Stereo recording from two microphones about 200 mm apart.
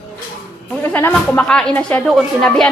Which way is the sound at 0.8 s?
10° left (ahead or behind).